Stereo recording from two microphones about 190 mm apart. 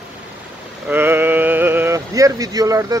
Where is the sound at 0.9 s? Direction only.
10° right (ahead or behind).